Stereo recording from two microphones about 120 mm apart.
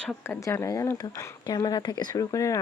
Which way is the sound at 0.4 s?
25° left (ahead or behind).